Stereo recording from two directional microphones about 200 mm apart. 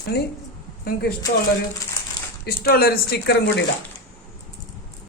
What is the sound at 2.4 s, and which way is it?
Speech, 50° left (ahead or behind).